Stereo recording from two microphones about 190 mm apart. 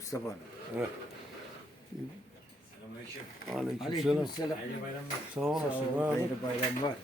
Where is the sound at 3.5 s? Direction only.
Centre (ahead or behind).